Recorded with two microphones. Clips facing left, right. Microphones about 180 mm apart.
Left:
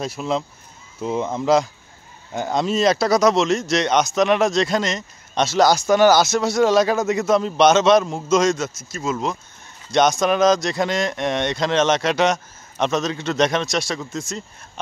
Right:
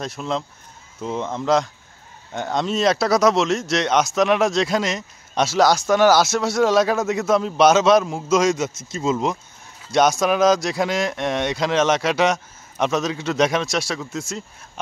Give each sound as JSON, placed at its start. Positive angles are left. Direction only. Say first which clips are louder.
{"t": 0.0, "sound": "speech", "louder": "left 2 dB", "side_deg": 5}